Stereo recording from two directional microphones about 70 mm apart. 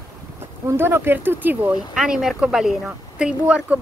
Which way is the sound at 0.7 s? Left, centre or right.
Right.